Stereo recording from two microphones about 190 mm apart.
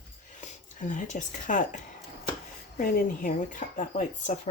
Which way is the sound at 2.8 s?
45° left (ahead or behind).